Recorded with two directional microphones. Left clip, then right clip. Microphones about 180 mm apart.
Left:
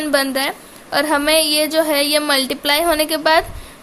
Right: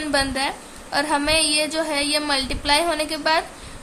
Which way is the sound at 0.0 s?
35° left (ahead or behind).